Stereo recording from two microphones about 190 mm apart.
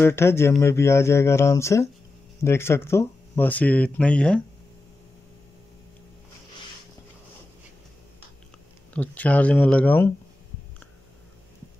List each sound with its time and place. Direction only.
0.0 s speech: 15° left (ahead or behind)
8.9 s speech: 10° left (ahead or behind)